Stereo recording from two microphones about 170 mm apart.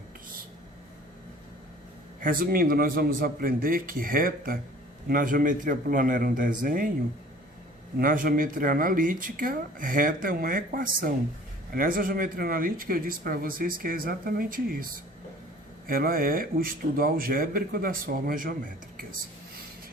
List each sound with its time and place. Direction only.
2.2 s a man's voice: 55° right (ahead or behind)
7.9 s speech: 55° right (ahead or behind)